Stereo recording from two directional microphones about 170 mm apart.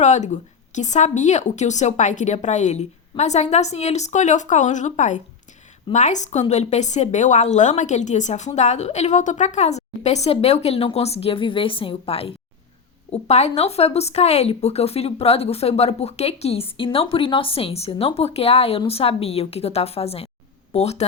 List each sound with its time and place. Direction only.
0.0 s a woman's voice: 45° left (ahead or behind)